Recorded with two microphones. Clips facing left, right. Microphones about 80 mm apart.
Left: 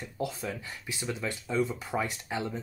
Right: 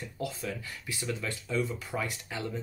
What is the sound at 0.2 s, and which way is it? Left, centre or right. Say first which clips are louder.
Speech: left 2 dB; left.